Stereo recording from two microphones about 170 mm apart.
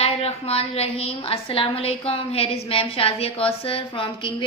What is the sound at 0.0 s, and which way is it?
A woman's voice, 35° left (ahead or behind).